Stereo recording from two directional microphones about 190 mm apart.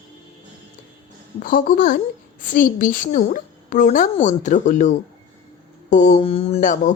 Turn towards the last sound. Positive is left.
turn(degrees=40)  # may be behind; listen again after turning